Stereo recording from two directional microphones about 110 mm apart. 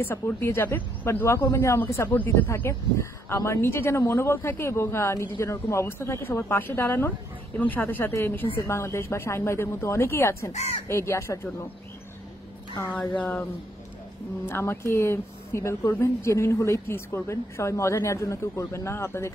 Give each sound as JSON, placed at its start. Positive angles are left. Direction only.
{"t": 0.0, "sound": "speech", "side_deg": 20}
{"t": 13.1, "sound": "speech", "side_deg": 15}